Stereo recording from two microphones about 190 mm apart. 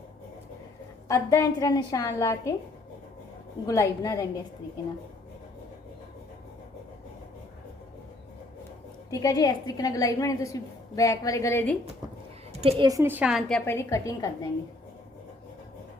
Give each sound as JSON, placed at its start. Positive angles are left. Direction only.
{"t": 1.0, "sound": "a woman's voice", "side_deg": 15}
{"t": 3.7, "sound": "a woman's voice", "side_deg": 15}
{"t": 9.0, "sound": "a woman's voice", "side_deg": 20}
{"t": 12.6, "sound": "a woman's voice", "side_deg": -30}
{"t": 12.9, "sound": "a woman's voice", "side_deg": -10}
{"t": 13.7, "sound": "a woman's voice", "side_deg": 15}